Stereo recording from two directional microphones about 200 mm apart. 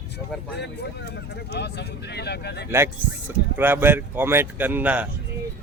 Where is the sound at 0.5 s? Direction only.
55° left (ahead or behind).